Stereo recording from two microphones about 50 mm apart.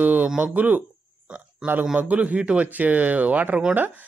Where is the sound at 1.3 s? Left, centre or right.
Centre.